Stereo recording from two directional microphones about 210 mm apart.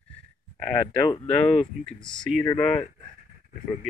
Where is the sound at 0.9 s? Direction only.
25° left (ahead or behind).